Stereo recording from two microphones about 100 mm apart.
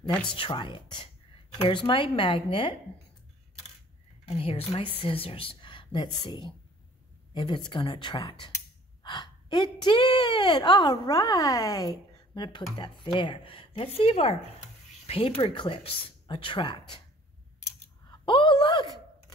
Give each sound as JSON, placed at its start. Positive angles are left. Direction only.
{"t": 0.1, "sound": "speech", "side_deg": 10}
{"t": 0.4, "sound": "speech", "side_deg": 55}
{"t": 4.3, "sound": "a woman's voice", "side_deg": 75}
{"t": 15.5, "sound": "a woman's voice", "side_deg": 50}
{"t": 15.8, "sound": "speech", "side_deg": 60}
{"t": 18.2, "sound": "a sound", "side_deg": 55}